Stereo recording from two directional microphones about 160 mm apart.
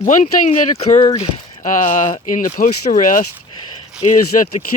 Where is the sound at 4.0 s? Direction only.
45° left (ahead or behind).